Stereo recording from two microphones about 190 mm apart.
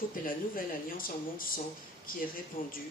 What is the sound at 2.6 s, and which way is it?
Speech, 45° left (ahead or behind).